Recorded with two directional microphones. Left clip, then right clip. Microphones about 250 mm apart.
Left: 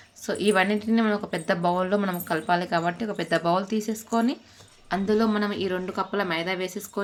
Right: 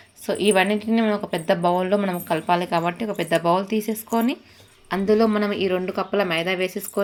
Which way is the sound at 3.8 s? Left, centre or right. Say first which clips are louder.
Right 4 dB; left.